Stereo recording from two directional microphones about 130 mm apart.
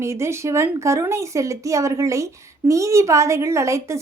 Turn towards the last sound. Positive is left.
turn(degrees=-20)  # may be behind; listen again after turning